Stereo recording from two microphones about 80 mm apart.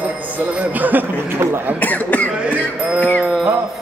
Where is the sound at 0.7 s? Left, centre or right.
Right.